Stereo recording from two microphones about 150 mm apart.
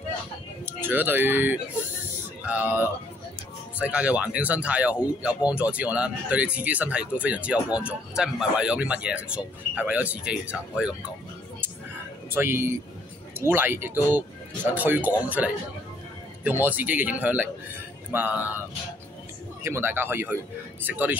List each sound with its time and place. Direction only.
0.7 s speech: 15° right (ahead or behind)
12.4 s speech: 15° right (ahead or behind)
19.6 s speech: 15° right (ahead or behind)